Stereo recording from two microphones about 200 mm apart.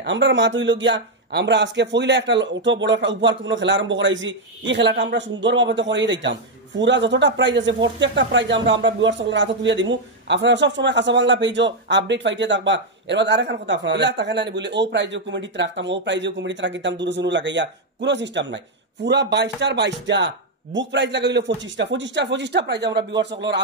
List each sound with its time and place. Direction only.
0.0 s speech: 65° right (ahead or behind)